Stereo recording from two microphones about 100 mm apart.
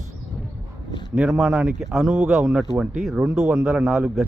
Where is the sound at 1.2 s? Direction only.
5° right (ahead or behind).